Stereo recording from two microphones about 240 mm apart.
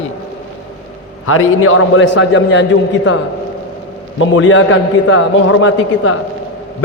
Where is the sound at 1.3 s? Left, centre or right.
Left.